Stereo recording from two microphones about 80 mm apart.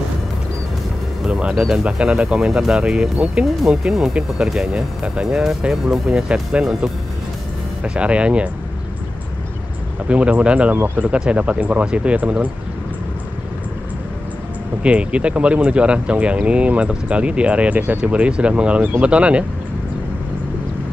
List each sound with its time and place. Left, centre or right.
1.2 s speech: centre
7.8 s speech: centre
10.0 s speech: centre
14.8 s speech: centre